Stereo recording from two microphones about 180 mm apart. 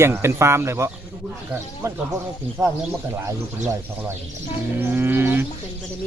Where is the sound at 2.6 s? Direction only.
20° right (ahead or behind).